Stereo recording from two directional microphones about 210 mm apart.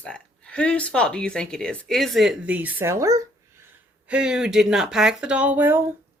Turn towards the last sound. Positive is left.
turn(degrees=-10)  # may be behind; listen again after turning